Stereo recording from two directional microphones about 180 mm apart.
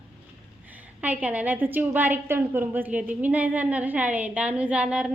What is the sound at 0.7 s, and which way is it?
A woman's voice, 10° right (ahead or behind).